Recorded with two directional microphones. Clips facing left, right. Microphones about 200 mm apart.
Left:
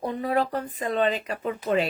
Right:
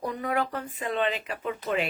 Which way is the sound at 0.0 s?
30° left (ahead or behind).